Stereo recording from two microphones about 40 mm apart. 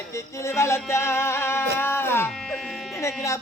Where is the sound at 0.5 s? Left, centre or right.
Left.